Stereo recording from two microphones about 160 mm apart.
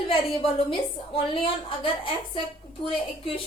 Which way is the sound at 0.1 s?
35° left (ahead or behind).